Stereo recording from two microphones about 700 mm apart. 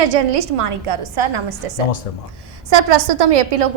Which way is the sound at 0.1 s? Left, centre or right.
Right.